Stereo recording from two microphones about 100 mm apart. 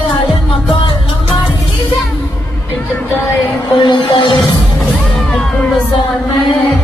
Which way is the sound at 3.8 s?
55° left (ahead or behind).